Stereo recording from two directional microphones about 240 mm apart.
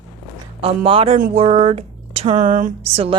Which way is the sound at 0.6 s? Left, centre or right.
Right.